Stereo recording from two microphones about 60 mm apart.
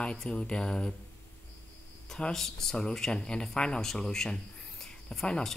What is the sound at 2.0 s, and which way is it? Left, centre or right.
Speech, centre.